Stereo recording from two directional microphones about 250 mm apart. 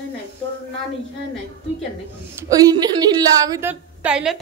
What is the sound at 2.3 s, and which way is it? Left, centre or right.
A woman's voice, centre.